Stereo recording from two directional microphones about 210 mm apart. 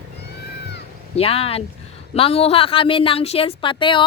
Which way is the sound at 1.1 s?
30° left (ahead or behind).